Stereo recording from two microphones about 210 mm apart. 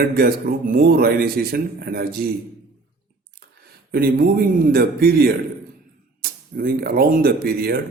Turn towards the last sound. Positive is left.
turn(degrees=-45)  # may be behind; listen again after turning